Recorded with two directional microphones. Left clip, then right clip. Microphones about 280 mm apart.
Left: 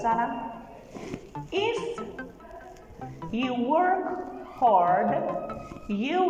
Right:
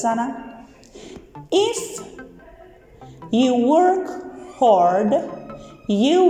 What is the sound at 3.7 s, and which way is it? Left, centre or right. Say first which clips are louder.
Speech: right 4 dB; right.